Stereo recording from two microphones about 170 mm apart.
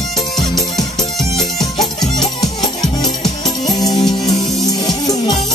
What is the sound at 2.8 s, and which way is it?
Music, 25° left (ahead or behind).